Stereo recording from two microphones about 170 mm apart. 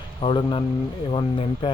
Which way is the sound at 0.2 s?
30° left (ahead or behind).